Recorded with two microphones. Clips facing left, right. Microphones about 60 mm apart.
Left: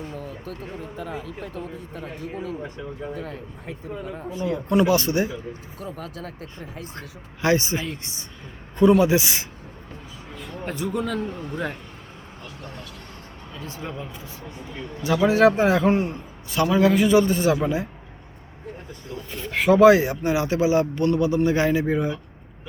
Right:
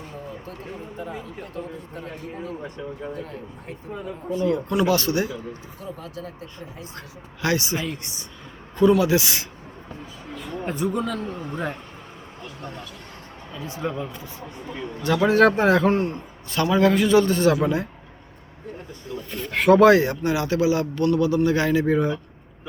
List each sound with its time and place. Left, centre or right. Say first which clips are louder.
4.3 s a man's voice: right 5 dB; centre
4.7 s speech: left 6 dB; left
5.8 s speech: left 1 dB; left
7.4 s speech: left 2 dB; left
10.4 s speech: right 3 dB; centre
13.6 s speech: right 3 dB; centre
13.8 s a man's voice: right 8 dB; centre
19.3 s speech: right 2 dB; centre; by 21.9 s left